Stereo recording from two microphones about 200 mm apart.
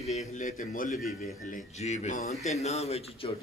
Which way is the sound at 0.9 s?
Centre (ahead or behind).